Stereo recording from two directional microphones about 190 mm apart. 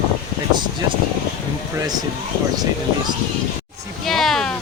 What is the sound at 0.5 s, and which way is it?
Speech, 25° right (ahead or behind).